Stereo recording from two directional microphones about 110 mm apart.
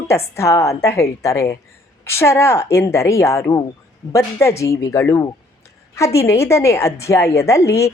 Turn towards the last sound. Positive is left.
turn(degrees=25)  # may be behind; listen again after turning